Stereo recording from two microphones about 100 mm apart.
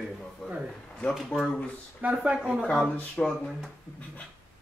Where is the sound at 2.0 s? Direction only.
10° right (ahead or behind).